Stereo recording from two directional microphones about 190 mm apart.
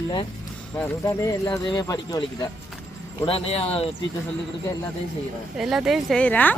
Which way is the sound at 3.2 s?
30° left (ahead or behind).